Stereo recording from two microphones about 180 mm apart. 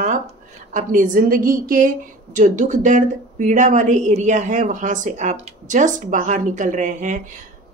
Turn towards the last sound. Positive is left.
turn(degrees=-45)  # may be behind; listen again after turning